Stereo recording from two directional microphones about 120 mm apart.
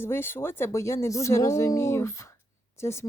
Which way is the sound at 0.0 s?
20° left (ahead or behind).